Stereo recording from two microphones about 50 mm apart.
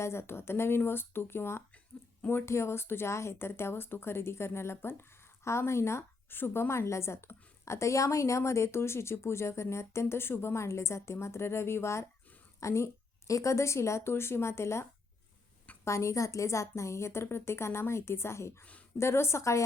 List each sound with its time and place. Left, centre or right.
0.0 s speech: left
5.5 s speech: left
6.3 s speech: left
7.6 s speech: left
12.5 s a woman's voice: left
15.8 s a woman's voice: left